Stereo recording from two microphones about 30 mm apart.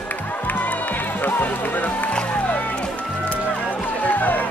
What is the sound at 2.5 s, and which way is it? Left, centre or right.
Music, left.